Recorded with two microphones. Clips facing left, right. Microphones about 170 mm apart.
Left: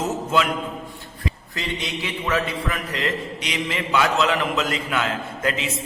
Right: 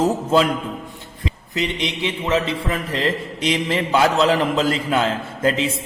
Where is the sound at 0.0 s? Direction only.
35° right (ahead or behind).